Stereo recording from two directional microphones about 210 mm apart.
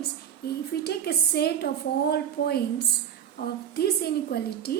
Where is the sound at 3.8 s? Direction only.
50° left (ahead or behind).